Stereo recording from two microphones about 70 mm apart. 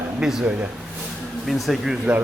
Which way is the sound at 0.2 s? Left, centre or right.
Centre.